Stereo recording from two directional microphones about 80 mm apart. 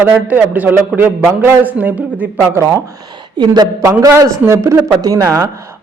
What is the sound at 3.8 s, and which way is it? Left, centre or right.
A man's voice, right.